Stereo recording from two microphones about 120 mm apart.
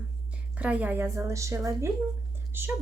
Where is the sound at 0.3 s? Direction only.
10° right (ahead or behind).